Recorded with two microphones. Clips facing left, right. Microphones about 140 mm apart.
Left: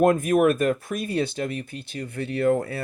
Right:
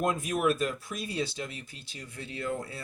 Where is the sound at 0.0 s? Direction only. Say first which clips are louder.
Left 10 dB; 55° left (ahead or behind).